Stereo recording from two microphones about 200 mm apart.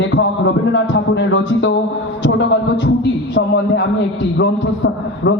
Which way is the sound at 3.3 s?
70° left (ahead or behind).